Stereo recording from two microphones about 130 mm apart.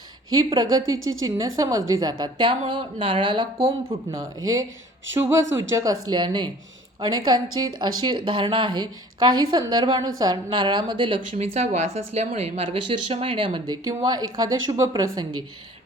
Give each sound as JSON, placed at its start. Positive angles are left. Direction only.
{"t": 0.3, "sound": "speech", "side_deg": -30}
{"t": 4.1, "sound": "speech", "side_deg": -25}
{"t": 11.3, "sound": "speech", "side_deg": -60}
{"t": 12.7, "sound": "speech", "side_deg": -45}
{"t": 13.7, "sound": "speech", "side_deg": -30}